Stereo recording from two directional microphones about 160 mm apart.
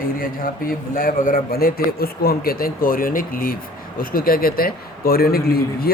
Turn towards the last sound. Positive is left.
turn(degrees=70)  # may be behind; listen again after turning